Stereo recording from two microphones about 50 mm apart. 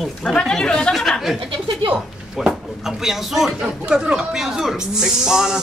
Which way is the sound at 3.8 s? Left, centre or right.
Centre.